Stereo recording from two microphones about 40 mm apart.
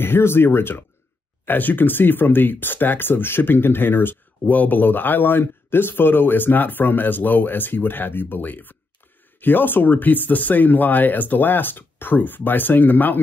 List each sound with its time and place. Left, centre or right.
0.0 s speech: left
1.4 s speech: left